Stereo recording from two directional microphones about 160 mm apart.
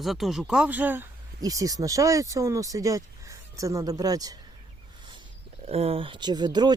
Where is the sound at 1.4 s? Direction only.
20° right (ahead or behind).